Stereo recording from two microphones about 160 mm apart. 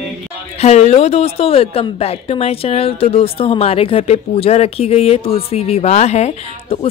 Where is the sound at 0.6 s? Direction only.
40° left (ahead or behind).